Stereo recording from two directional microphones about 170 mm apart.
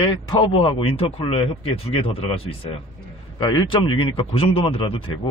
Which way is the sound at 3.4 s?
25° left (ahead or behind).